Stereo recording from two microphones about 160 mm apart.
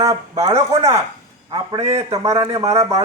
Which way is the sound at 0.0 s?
20° right (ahead or behind).